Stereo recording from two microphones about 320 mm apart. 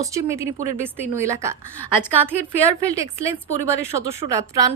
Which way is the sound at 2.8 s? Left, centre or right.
Centre.